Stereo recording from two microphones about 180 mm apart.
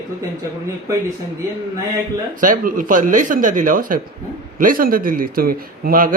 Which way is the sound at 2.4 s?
50° right (ahead or behind).